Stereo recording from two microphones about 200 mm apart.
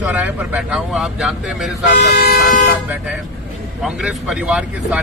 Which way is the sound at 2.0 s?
50° left (ahead or behind).